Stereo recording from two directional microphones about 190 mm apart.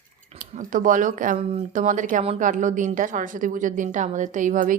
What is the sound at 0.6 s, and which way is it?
A woman's voice, 45° right (ahead or behind).